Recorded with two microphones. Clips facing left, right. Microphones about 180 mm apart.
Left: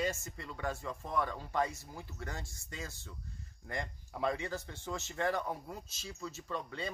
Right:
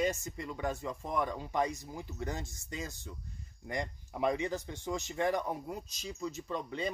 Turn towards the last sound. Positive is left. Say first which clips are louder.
# right 3 dB
turn(degrees=-20)  # may be behind; listen again after turning